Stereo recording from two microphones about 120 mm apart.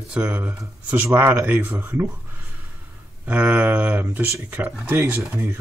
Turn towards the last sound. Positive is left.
turn(degrees=-15)  # may be behind; listen again after turning